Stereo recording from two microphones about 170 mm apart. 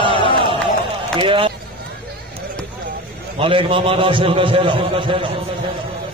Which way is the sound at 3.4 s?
30° right (ahead or behind).